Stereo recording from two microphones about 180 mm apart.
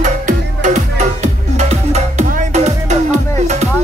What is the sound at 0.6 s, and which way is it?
Music, 40° right (ahead or behind).